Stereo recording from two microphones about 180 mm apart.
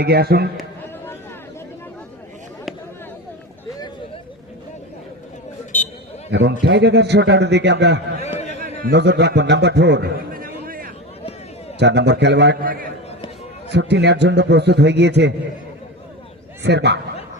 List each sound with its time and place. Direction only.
0.0 s a man's voice: 60° right (ahead or behind)
6.3 s a man's voice: 70° right (ahead or behind); by 10.9 s 50° right (ahead or behind)
11.8 s a man's voice: 70° right (ahead or behind); by 12.9 s 50° right (ahead or behind)
13.7 s a man's voice: 70° right (ahead or behind)
16.6 s a man's voice: 70° right (ahead or behind)